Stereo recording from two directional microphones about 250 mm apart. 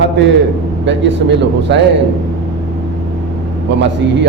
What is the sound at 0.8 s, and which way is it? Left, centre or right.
Speech, right.